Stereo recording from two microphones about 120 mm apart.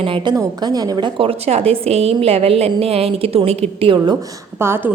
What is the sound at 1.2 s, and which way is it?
A woman's voice, 55° right (ahead or behind).